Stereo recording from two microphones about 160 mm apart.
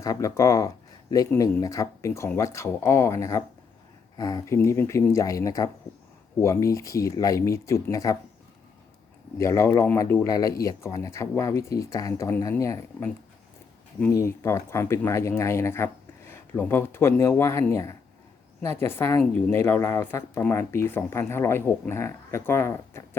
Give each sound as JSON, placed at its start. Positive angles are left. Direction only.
{"t": 0.0, "sound": "speech", "side_deg": 20}
{"t": 9.4, "sound": "a woman's voice", "side_deg": 20}